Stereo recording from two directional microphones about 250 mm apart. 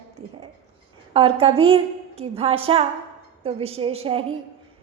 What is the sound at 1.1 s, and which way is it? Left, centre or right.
A woman's voice, right.